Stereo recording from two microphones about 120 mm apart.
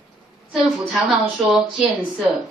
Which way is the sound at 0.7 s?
5° right (ahead or behind).